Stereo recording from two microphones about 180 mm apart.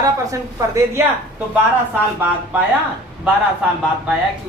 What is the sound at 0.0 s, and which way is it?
A woman's voice, 15° right (ahead or behind).